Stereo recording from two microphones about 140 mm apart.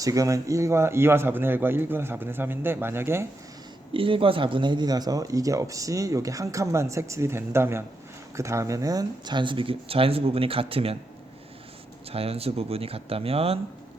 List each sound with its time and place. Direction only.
0.0 s speech: 25° right (ahead or behind)
3.9 s speech: 40° right (ahead or behind)
12.1 s speech: 45° right (ahead or behind)